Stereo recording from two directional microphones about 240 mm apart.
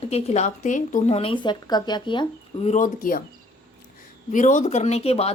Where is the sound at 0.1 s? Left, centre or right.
Left.